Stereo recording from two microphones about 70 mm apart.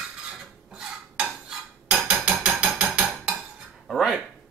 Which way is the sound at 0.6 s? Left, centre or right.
Centre.